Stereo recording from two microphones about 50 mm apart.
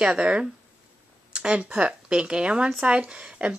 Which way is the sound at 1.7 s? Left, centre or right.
Right.